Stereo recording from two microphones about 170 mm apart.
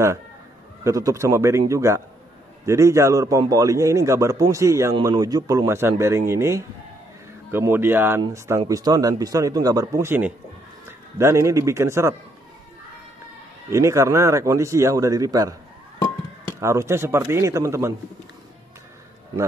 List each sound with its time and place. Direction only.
0.8 s a man's voice: 20° right (ahead or behind)
13.7 s a man's voice: 15° right (ahead or behind)
16.6 s a man's voice: 15° right (ahead or behind)